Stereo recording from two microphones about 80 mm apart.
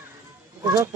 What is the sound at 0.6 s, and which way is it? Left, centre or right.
Speech, right.